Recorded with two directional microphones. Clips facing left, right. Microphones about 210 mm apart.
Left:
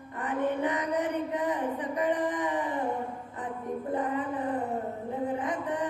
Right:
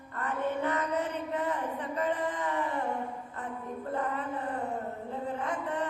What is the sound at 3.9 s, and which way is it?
Music, 15° left (ahead or behind).